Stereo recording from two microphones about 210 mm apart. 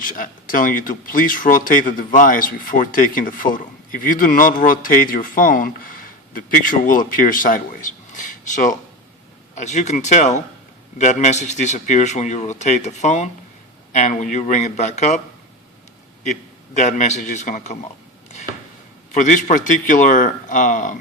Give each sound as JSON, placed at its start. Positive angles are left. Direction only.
{"t": 0.0, "sound": "speech", "side_deg": 40}
{"t": 16.2, "sound": "a man's voice", "side_deg": 35}
{"t": 19.1, "sound": "speech", "side_deg": 35}